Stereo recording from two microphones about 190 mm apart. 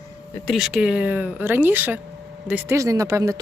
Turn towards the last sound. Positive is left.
turn(degrees=-15)  # may be behind; listen again after turning